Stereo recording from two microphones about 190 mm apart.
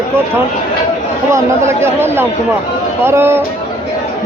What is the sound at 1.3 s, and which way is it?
Speech, 15° right (ahead or behind).